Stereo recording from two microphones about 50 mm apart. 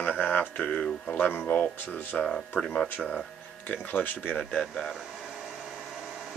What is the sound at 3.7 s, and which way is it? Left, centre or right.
Speech, left.